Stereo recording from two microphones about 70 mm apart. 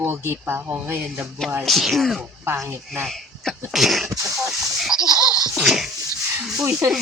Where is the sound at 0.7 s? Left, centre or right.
Right.